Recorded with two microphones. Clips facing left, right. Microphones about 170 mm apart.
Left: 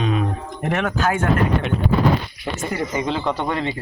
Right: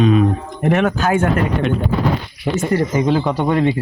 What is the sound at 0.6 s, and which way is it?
Speech, 15° right (ahead or behind).